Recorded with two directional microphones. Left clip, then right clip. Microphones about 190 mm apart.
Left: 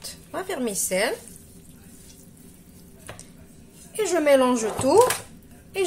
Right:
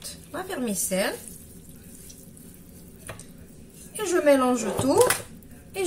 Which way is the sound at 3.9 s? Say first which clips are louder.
Left 2 dB; 55° left (ahead or behind).